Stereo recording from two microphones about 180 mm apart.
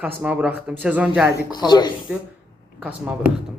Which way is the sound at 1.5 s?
25° left (ahead or behind).